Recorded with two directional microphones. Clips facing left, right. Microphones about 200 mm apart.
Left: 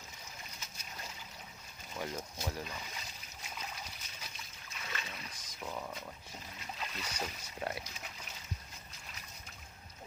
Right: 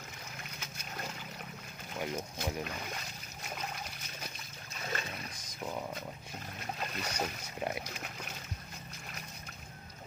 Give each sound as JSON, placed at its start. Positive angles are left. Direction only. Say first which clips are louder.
{"t": 0.6, "sound": "boat", "louder": "right 8 dB", "side_deg": -65}
{"t": 2.0, "sound": "speech", "louder": "right 3 dB", "side_deg": -20}
{"t": 2.6, "sound": "speech", "louder": "right 5 dB", "side_deg": -60}
{"t": 3.4, "sound": "water", "louder": "right 5 dB", "side_deg": -60}
{"t": 4.7, "sound": "a sound", "louder": "right 6 dB", "side_deg": -45}
{"t": 6.6, "sound": "boat", "louder": "right 5 dB", "side_deg": -55}
{"t": 7.9, "sound": "splash", "louder": "right 6 dB", "side_deg": -60}